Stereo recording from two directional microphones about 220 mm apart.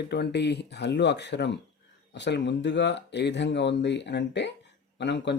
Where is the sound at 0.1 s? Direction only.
50° left (ahead or behind).